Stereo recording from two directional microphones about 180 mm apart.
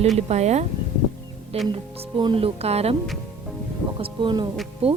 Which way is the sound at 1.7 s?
30° right (ahead or behind).